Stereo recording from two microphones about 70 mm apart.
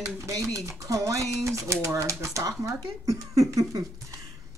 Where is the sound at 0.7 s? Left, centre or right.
Right.